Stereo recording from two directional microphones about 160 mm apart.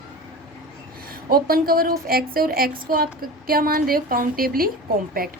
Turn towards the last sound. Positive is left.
turn(degrees=-65)  # may be behind; listen again after turning